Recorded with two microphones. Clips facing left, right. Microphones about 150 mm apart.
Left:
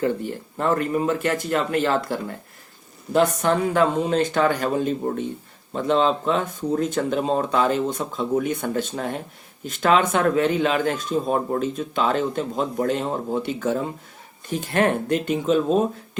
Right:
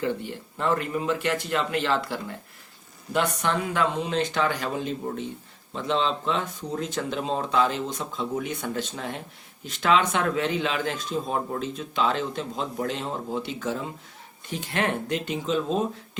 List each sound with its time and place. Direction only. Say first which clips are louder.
0.0 s speech: left 5 dB; 45° left (ahead or behind)